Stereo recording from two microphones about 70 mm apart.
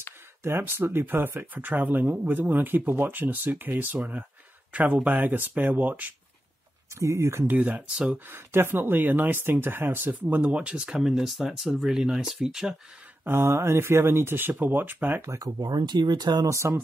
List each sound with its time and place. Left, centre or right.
0.4 s speech: right
7.0 s speech: right
7.4 s speech: right
7.9 s speech: centre
8.3 s speech: right; by 12.7 s centre
13.2 s speech: right
15.2 s speech: right
16.4 s speech: right